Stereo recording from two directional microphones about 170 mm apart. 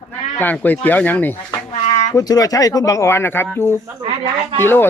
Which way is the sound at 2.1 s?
20° left (ahead or behind).